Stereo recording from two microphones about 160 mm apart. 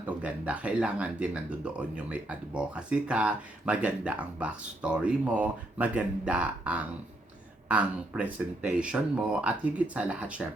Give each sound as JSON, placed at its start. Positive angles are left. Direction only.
{"t": 0.0, "sound": "speech", "side_deg": -10}